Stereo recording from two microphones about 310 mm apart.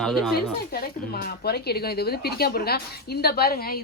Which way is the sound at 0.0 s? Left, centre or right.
Centre.